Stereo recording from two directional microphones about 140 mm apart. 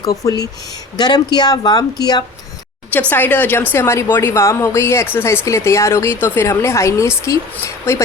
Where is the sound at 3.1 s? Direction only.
15° left (ahead or behind).